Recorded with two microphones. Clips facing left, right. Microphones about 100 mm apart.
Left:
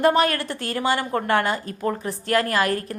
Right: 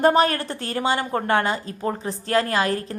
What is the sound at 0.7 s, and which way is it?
A woman's voice, 25° right (ahead or behind).